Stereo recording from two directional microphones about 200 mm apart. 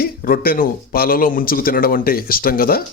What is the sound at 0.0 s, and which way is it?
A man's voice, 45° left (ahead or behind).